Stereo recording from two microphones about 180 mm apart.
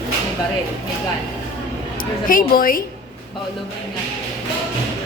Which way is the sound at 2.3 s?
50° left (ahead or behind).